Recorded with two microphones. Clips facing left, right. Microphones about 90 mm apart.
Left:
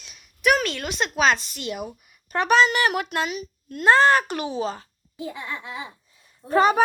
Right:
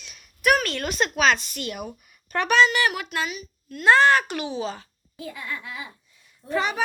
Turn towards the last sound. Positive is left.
turn(degrees=40)  # may be behind; listen again after turning